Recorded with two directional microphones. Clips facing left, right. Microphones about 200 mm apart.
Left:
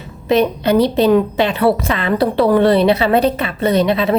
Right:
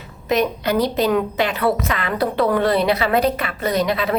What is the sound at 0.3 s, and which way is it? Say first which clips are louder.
A woman's voice: left 5 dB; 30° left (ahead or behind).